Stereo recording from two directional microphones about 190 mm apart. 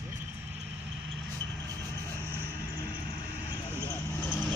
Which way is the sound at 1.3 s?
10° left (ahead or behind).